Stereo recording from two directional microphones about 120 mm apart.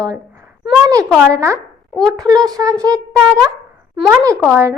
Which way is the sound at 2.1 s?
30° right (ahead or behind).